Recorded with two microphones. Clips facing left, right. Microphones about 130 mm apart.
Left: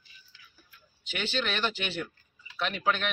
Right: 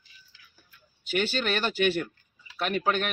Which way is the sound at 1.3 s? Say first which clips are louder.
Right 3 dB; 45° right (ahead or behind).